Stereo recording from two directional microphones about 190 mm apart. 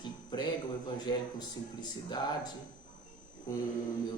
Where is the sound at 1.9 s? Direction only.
20° left (ahead or behind).